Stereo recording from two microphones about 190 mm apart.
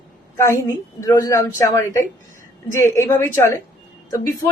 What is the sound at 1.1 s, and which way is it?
A woman's voice, 15° left (ahead or behind).